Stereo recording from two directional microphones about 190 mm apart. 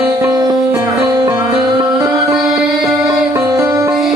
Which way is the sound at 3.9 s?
Centre (ahead or behind).